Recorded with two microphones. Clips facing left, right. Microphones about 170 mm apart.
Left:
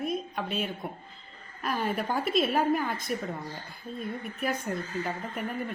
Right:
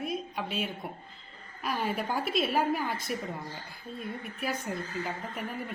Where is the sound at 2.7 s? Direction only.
Centre (ahead or behind).